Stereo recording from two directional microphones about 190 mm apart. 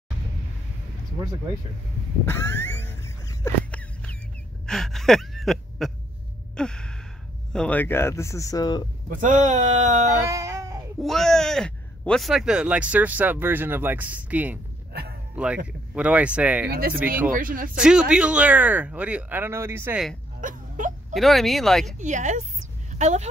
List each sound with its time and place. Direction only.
2.2 s a sound: 10° left (ahead or behind)
6.5 s sigh: 5° left (ahead or behind)
7.5 s speech: 5° left (ahead or behind)
9.1 s speech: 40° right (ahead or behind)
10.3 s a sound: 15° right (ahead or behind)
11.0 s speech: centre (ahead or behind)
14.9 s a sound: 55° right (ahead or behind)
15.3 s speech: 5° right (ahead or behind)
16.6 s speech: 55° right (ahead or behind)
17.7 s speech: 5° right (ahead or behind)
20.3 s a sound: 40° right (ahead or behind)
21.1 s speech: centre (ahead or behind)
21.8 s speech: 40° right (ahead or behind)